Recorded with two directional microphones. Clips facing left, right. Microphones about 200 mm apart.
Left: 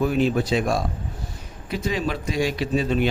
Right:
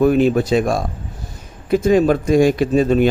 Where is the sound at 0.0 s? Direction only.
50° right (ahead or behind).